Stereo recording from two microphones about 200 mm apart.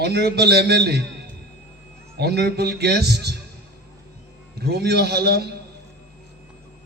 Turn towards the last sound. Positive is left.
turn(degrees=-55)  # may be behind; listen again after turning